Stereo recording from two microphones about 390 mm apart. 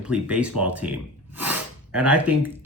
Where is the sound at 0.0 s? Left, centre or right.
Centre.